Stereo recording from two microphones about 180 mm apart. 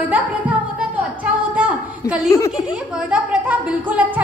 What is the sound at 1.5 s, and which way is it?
Speech, 5° right (ahead or behind).